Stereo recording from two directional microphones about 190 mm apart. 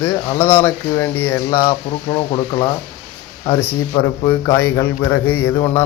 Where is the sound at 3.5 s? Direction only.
10° left (ahead or behind).